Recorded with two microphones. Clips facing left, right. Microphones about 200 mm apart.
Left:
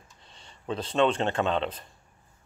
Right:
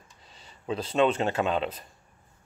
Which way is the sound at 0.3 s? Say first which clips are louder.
Right 1 dB; 5° right (ahead or behind).